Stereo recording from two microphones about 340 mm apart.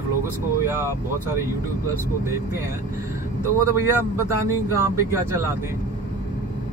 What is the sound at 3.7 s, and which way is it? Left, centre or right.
A man's voice, centre.